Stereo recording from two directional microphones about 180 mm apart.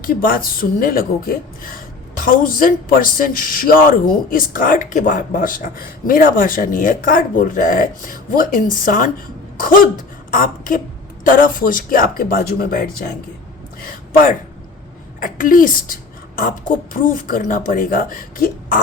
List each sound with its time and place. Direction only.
0.0 s speech: 50° left (ahead or behind)
10.3 s speech: 50° left (ahead or behind)
15.2 s speech: 50° left (ahead or behind)